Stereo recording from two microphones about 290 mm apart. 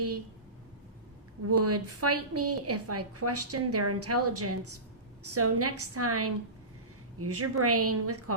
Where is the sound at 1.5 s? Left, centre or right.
Right.